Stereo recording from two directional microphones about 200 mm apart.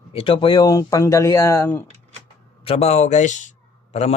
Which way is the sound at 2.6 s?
30° left (ahead or behind).